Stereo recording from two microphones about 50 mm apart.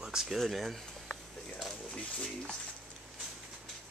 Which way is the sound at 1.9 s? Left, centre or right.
Centre.